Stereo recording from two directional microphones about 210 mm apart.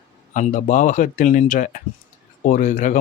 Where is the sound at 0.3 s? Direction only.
35° left (ahead or behind).